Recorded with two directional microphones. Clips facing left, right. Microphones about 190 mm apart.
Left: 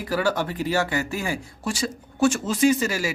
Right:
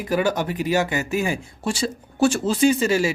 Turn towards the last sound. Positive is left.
turn(degrees=-25)  # may be behind; listen again after turning